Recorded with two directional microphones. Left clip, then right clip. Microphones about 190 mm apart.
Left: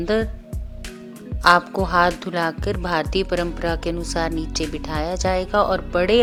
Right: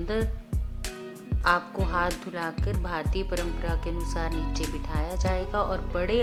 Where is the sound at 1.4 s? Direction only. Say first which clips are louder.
Left 10 dB; 45° left (ahead or behind).